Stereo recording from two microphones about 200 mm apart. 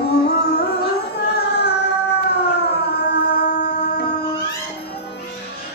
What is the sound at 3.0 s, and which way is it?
Music, 55° left (ahead or behind).